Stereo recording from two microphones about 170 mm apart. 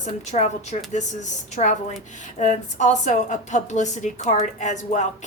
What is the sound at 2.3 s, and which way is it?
A woman's voice, 45° left (ahead or behind).